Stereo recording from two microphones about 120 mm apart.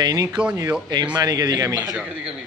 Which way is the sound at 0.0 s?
30° right (ahead or behind).